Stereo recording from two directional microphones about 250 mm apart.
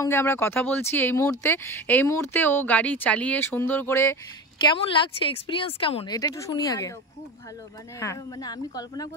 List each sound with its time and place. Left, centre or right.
0.0 s speech: centre
4.6 s speech: left
8.0 s speech: centre